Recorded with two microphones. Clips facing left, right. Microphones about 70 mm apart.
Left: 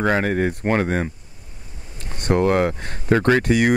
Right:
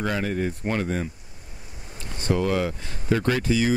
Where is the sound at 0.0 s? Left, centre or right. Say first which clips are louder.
Left 6 dB; left.